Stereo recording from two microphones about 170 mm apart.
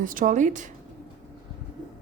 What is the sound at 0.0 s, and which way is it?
Speech, 50° right (ahead or behind).